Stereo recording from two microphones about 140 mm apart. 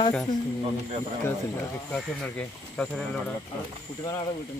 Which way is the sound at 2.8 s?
5° left (ahead or behind).